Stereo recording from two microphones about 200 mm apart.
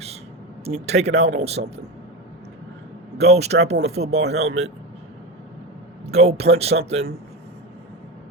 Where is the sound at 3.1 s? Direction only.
30° right (ahead or behind).